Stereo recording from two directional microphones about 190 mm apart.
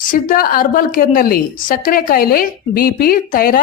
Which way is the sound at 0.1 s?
50° left (ahead or behind).